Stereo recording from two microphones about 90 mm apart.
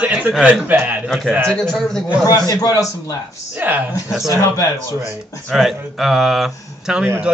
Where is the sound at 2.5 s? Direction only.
45° left (ahead or behind).